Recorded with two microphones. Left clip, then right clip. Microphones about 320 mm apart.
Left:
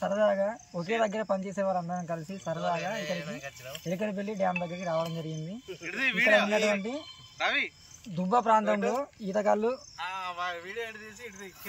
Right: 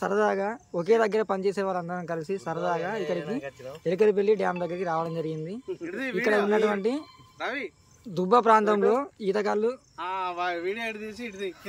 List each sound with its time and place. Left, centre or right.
0.0 s speech: centre
9.9 s speech: right